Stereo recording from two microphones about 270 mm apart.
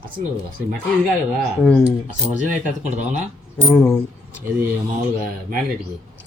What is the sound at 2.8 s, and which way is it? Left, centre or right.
Speech, right.